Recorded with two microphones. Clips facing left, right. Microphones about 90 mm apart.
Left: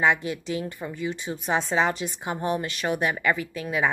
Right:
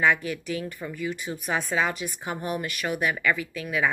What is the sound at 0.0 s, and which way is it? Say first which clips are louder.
Speech: even; 25° left (ahead or behind).